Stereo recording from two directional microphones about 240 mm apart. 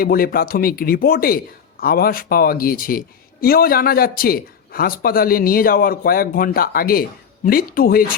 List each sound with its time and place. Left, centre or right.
0.0 s speech: left